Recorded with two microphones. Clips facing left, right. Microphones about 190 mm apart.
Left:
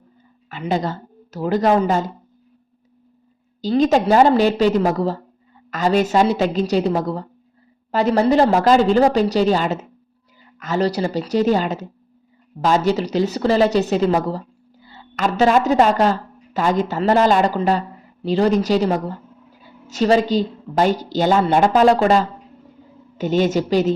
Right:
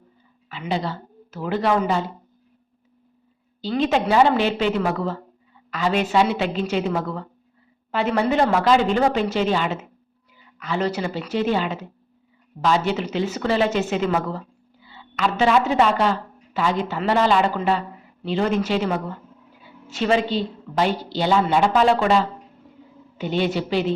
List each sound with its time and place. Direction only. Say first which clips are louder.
0.4 s a woman's voice: left 4 dB; 45° left (ahead or behind)
3.6 s a woman's voice: left 5 dB; 40° left (ahead or behind)